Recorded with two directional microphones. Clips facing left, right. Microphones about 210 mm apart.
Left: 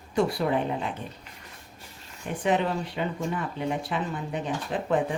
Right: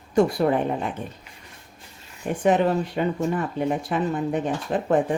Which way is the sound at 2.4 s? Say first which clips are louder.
Right 5 dB; 50° right (ahead or behind).